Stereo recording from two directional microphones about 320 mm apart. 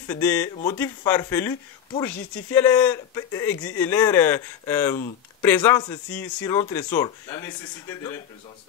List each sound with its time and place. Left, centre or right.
0.1 s speech: centre